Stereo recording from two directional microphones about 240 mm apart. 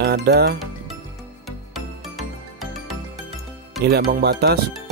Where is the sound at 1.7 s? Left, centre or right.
Centre.